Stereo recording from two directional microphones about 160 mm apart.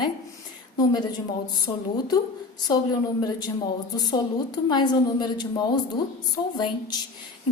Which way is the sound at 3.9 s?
25° left (ahead or behind).